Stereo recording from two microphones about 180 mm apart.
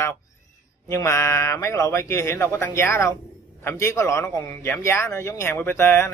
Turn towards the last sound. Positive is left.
turn(degrees=15)  # may be behind; listen again after turning